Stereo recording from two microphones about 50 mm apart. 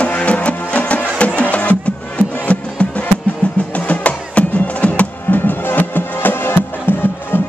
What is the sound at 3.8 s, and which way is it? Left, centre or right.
Music, left.